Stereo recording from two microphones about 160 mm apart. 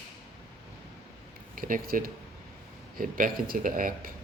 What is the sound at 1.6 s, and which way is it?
Speech, 60° right (ahead or behind).